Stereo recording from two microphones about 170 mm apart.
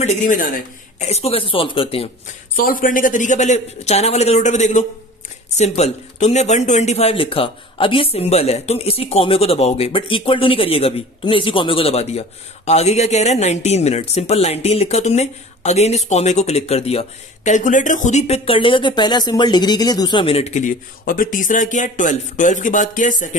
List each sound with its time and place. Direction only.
0.0 s speech: 45° left (ahead or behind)
2.5 s speech: 55° left (ahead or behind)
21.0 s speech: 55° left (ahead or behind)